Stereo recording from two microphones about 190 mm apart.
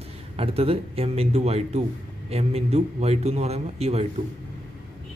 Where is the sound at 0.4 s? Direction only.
30° right (ahead or behind).